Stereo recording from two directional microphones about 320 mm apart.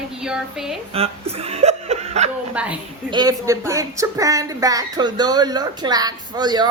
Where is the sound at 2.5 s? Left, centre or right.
Centre.